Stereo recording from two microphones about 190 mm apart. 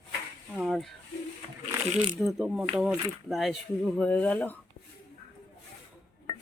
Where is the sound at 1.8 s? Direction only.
35° right (ahead or behind).